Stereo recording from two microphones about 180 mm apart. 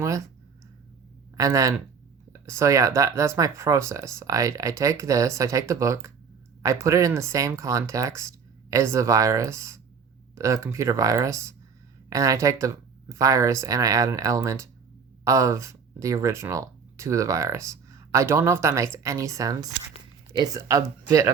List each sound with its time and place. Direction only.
1.4 s speech: 20° right (ahead or behind)